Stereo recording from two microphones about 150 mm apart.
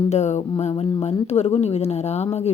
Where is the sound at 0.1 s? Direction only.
50° left (ahead or behind).